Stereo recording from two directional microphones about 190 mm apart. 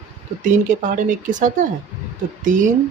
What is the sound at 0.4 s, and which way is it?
A woman's voice, 45° right (ahead or behind).